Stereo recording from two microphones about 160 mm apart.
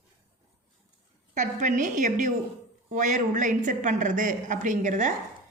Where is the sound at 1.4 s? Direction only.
50° right (ahead or behind).